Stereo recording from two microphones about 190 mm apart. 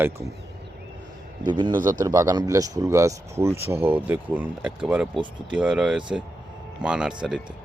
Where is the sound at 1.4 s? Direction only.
25° right (ahead or behind).